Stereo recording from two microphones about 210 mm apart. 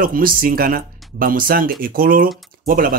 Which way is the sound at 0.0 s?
45° right (ahead or behind).